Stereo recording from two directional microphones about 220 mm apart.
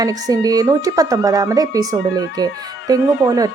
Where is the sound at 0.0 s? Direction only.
15° right (ahead or behind).